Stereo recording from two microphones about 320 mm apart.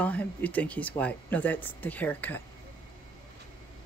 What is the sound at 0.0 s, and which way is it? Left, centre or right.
Speech, centre.